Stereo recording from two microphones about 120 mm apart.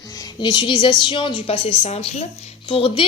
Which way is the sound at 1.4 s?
55° left (ahead or behind).